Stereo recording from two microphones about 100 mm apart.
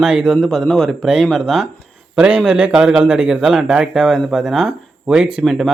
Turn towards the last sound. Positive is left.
turn(degrees=0)  # may be behind; listen again after turning